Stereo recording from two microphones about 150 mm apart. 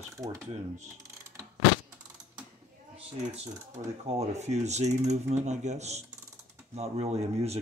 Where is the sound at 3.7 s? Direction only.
50° right (ahead or behind).